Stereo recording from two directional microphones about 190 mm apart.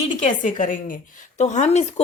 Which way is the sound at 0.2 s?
40° left (ahead or behind).